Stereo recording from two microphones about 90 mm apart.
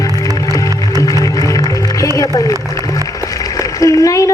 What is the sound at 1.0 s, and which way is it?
Music, 40° left (ahead or behind).